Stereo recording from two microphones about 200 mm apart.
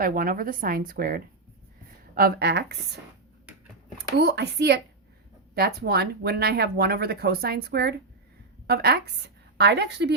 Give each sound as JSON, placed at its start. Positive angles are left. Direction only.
{"t": 0.0, "sound": "speech", "side_deg": -45}
{"t": 4.2, "sound": "a woman's voice", "side_deg": -55}